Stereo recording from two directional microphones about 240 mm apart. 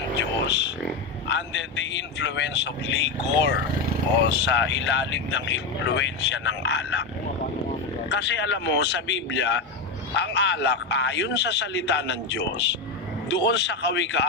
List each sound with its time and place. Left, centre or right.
0.2 s a sound: left
1.3 s speech: left
8.1 s speech: left